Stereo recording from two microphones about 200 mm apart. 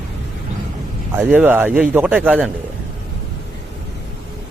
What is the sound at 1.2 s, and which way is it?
Speech, 10° right (ahead or behind).